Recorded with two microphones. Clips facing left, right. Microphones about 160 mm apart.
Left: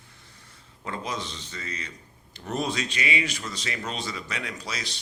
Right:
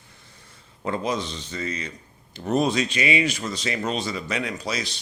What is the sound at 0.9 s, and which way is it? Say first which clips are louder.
A man's voice: right 7 dB; 25° right (ahead or behind).